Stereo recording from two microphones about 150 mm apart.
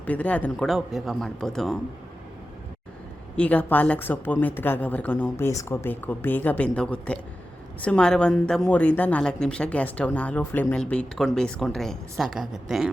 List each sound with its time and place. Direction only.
0.0 s speech: 10° left (ahead or behind)
3.3 s a woman's voice: 10° left (ahead or behind)